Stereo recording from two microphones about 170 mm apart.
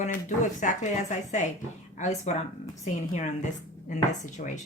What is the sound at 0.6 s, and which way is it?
Speech, 45° left (ahead or behind).